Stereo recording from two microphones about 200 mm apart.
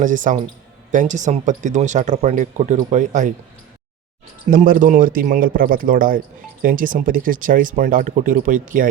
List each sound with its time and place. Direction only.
0.0 s speech: 40° right (ahead or behind)
4.5 s a man's voice: 45° right (ahead or behind)